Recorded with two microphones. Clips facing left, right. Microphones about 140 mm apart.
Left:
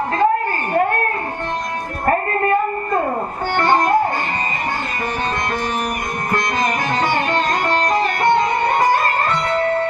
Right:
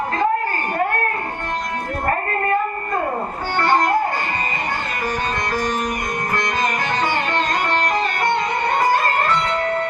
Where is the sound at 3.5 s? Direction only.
20° left (ahead or behind).